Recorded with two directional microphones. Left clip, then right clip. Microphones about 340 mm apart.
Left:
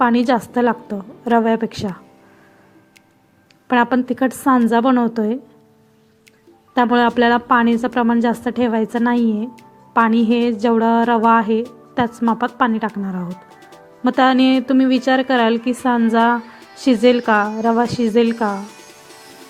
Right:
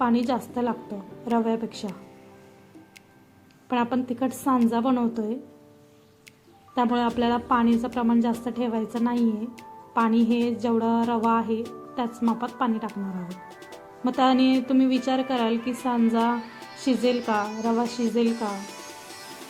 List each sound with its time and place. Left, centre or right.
0.0 s a woman's voice: left
3.7 s a woman's voice: centre
6.7 s a woman's voice: centre
13.2 s music: centre
14.2 s a woman's voice: centre
16.4 s music: centre
16.7 s a woman's voice: centre